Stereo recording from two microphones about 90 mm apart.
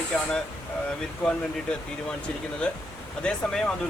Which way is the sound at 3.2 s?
10° left (ahead or behind).